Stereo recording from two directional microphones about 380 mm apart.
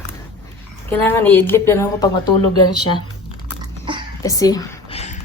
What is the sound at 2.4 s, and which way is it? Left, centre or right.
Speech, left.